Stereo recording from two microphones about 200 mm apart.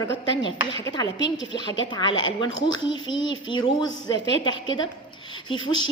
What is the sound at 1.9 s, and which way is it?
A woman's voice, 20° left (ahead or behind).